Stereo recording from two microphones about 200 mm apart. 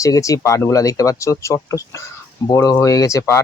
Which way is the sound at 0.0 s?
15° left (ahead or behind).